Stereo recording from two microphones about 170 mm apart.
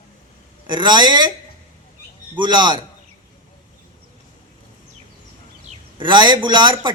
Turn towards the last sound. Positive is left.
turn(degrees=-25)  # may be behind; listen again after turning